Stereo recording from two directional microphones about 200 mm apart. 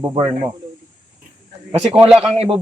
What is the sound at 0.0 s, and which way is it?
Speech, 20° right (ahead or behind).